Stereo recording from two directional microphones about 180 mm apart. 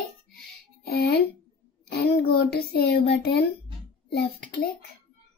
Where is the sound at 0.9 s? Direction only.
65° left (ahead or behind).